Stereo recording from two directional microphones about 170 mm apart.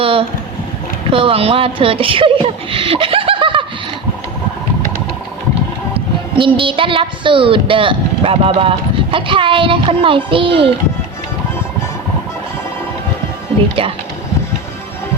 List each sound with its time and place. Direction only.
0.0 s a sound: 30° right (ahead or behind)
1.1 s speech: 35° right (ahead or behind)
5.9 s speech: 30° right (ahead or behind)